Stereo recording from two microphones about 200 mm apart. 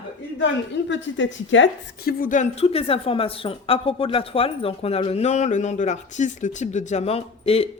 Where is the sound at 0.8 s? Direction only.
65° left (ahead or behind).